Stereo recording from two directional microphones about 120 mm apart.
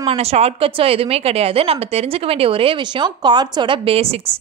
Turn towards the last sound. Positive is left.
turn(degrees=-55)  # may be behind; listen again after turning